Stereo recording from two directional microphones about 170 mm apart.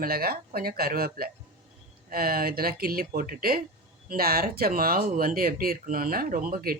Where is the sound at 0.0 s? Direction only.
60° right (ahead or behind).